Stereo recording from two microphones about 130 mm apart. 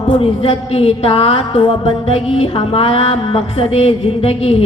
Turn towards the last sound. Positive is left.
turn(degrees=50)  # may be behind; listen again after turning